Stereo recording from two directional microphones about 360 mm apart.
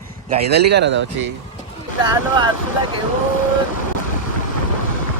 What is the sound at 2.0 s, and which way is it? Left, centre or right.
Speech, centre.